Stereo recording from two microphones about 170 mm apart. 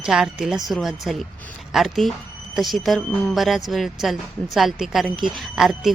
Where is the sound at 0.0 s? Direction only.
5° right (ahead or behind).